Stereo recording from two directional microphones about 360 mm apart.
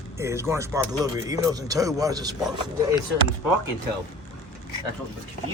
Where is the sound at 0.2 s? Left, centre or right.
Centre.